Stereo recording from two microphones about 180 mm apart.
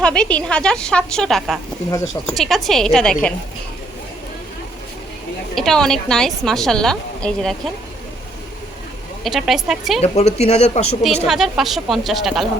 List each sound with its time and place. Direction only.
0.0 s a woman's voice: 5° left (ahead or behind)
1.9 s speech: 20° left (ahead or behind)
2.3 s a woman's voice: centre (ahead or behind)
5.5 s a woman's voice: 5° left (ahead or behind)
9.2 s a woman's voice: centre (ahead or behind)
10.0 s speech: 35° left (ahead or behind)
11.3 s a woman's voice: centre (ahead or behind)